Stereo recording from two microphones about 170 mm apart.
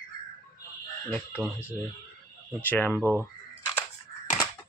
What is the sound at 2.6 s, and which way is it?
Speech, 10° left (ahead or behind).